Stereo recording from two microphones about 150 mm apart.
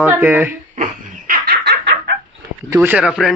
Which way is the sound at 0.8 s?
70° right (ahead or behind).